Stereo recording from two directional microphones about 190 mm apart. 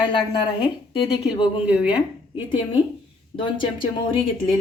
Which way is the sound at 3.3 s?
25° left (ahead or behind).